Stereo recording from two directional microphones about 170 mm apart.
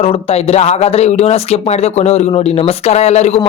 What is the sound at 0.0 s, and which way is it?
A man's voice, 35° left (ahead or behind).